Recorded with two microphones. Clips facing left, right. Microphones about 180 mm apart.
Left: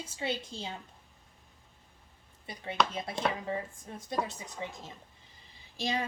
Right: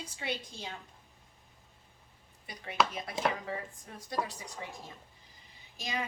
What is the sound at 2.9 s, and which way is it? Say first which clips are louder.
A woman's voice: even; 25° left (ahead or behind).